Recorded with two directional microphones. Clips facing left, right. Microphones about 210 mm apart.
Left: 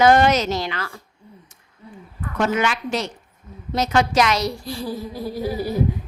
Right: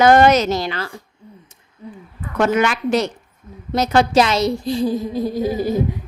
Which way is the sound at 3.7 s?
35° right (ahead or behind).